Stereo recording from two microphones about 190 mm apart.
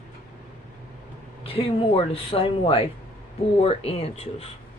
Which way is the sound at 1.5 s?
30° left (ahead or behind).